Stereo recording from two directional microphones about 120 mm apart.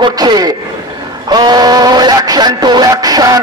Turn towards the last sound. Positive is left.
turn(degrees=-30)  # may be behind; listen again after turning